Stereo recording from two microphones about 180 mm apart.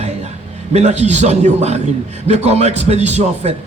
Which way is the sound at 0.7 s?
40° right (ahead or behind).